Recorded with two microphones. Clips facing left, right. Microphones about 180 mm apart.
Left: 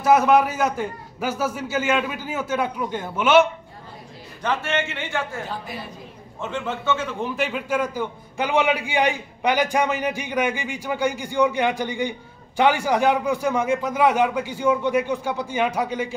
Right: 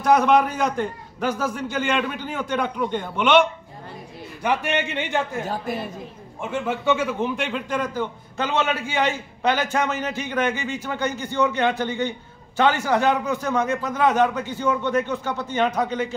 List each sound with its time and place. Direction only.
0.0 s a man's voice: 5° left (ahead or behind)
4.4 s a man's voice: 15° right (ahead or behind)
5.5 s a woman's voice: 50° right (ahead or behind)
6.4 s a man's voice: 10° right (ahead or behind); by 16.1 s 10° left (ahead or behind)